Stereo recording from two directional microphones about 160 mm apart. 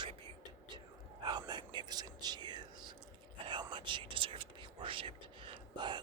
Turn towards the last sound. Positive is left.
turn(degrees=-30)  # may be behind; listen again after turning